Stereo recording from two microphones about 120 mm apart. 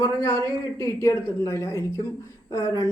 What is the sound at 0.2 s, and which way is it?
Speech, 20° left (ahead or behind).